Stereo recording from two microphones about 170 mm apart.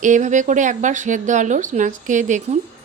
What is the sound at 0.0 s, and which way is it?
A woman's voice, 45° right (ahead or behind).